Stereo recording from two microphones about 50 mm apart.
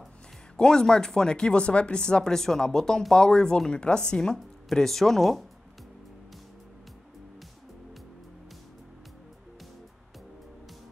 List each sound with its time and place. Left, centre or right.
0.6 s speech: centre